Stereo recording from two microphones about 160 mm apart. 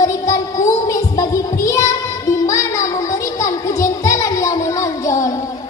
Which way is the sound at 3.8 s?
20° left (ahead or behind).